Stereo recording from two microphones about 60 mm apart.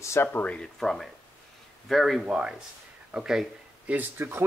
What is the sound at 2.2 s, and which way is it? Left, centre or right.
Speech, centre.